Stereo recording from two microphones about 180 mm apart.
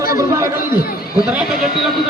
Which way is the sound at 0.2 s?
20° right (ahead or behind).